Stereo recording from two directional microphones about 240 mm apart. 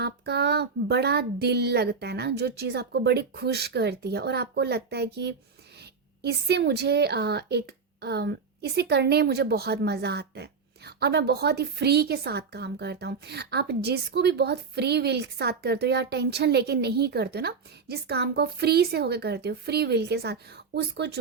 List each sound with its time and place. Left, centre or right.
0.0 s speech: right